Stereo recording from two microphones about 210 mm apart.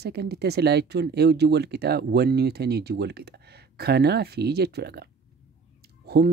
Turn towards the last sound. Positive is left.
turn(degrees=-50)  # may be behind; listen again after turning